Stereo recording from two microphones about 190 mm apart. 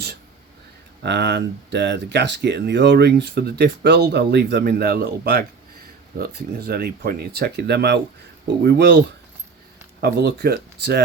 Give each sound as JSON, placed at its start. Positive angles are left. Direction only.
{"t": 1.0, "sound": "speech", "side_deg": -65}
{"t": 10.0, "sound": "speech", "side_deg": -60}